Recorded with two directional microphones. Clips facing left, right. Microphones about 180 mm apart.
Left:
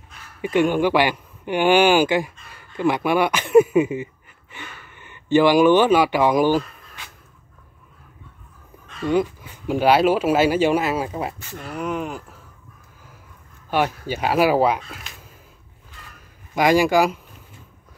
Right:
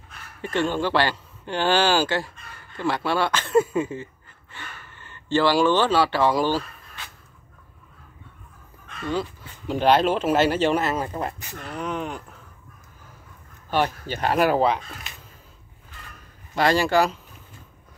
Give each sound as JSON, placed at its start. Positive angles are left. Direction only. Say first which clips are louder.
{"t": 0.4, "sound": "speech", "louder": "left 6 dB", "side_deg": 15}
{"t": 9.0, "sound": "speech", "louder": "left 7 dB", "side_deg": 15}
{"t": 13.7, "sound": "speech", "louder": "left 2 dB", "side_deg": 10}
{"t": 16.5, "sound": "speech", "louder": "left 3 dB", "side_deg": 10}